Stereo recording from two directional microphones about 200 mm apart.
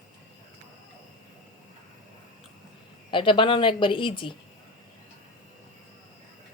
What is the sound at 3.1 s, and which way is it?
A woman's voice, 25° left (ahead or behind).